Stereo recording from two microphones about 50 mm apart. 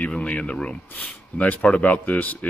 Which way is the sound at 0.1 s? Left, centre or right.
Left.